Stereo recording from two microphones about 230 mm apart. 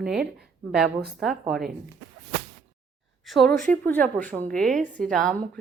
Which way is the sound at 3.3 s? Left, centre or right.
Centre.